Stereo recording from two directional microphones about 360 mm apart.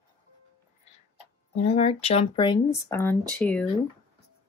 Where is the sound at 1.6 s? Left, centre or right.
Centre.